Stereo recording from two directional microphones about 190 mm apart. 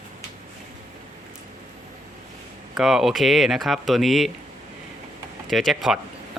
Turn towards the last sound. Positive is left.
turn(degrees=0)  # may be behind; listen again after turning